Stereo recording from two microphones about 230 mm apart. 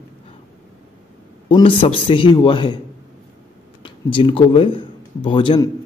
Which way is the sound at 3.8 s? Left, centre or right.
Left.